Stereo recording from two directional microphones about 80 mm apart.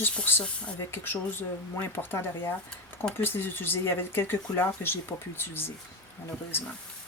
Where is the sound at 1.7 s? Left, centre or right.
Left.